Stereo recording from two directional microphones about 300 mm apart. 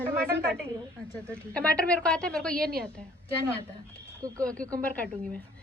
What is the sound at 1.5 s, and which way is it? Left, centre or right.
A woman's voice, centre.